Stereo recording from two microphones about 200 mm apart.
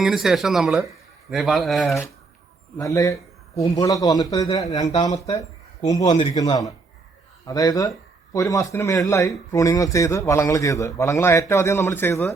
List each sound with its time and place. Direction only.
0.0 s speech: centre (ahead or behind)
2.7 s a man's voice: 15° left (ahead or behind)
5.1 s speech: 30° left (ahead or behind)
5.8 s a man's voice: 20° left (ahead or behind)